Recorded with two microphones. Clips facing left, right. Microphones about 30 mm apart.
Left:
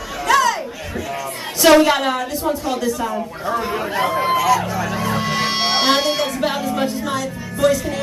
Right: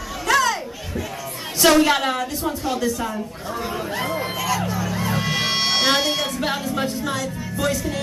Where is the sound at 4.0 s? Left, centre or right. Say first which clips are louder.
Left 10 dB; centre.